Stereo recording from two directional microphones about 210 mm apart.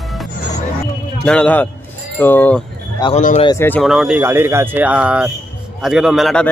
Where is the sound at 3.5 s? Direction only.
10° left (ahead or behind).